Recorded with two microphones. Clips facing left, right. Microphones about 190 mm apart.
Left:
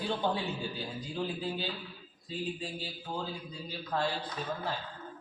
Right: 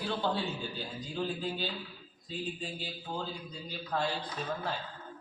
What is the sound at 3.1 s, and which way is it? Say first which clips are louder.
Speech: even; 10° left (ahead or behind).